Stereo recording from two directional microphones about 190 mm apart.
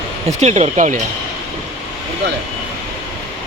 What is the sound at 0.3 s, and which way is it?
Speech, 35° right (ahead or behind).